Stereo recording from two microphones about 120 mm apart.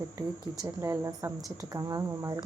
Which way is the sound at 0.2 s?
25° right (ahead or behind).